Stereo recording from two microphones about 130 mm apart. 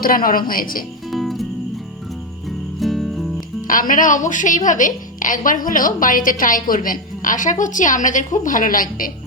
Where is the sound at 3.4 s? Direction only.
90° left.